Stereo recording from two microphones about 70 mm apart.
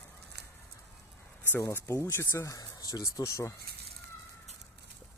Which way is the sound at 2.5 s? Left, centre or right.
Left.